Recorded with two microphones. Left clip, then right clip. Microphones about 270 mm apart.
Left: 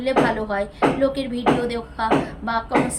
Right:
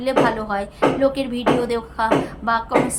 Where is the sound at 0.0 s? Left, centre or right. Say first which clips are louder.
Right 1 dB; centre.